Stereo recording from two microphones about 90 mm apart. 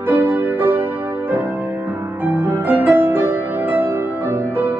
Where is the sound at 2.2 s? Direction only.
25° right (ahead or behind).